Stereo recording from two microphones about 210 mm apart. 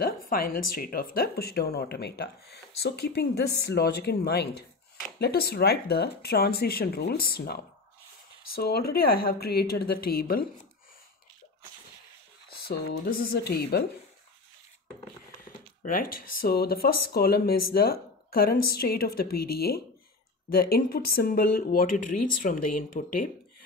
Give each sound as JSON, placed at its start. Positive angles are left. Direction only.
{"t": 0.0, "sound": "speech", "side_deg": 45}
{"t": 12.6, "sound": "speech", "side_deg": 45}
{"t": 15.8, "sound": "speech", "side_deg": 40}